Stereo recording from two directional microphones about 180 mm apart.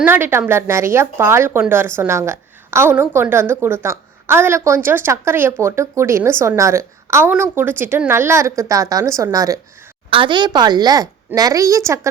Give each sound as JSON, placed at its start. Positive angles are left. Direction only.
{"t": 0.0, "sound": "a woman's voice", "side_deg": -10}